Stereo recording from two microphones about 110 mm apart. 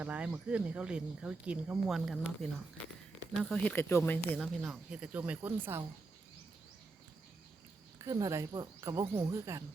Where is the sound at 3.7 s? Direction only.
20° left (ahead or behind).